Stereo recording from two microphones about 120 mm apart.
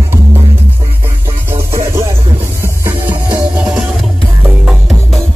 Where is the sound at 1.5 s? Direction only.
20° right (ahead or behind).